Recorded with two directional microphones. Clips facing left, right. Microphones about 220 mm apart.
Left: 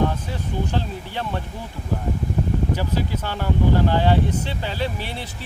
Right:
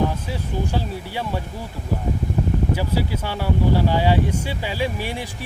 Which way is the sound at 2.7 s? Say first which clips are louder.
Right 1 dB; 10° right (ahead or behind).